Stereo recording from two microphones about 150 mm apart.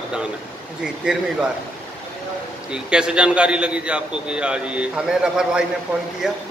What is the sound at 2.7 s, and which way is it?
A man's voice, 5° right (ahead or behind).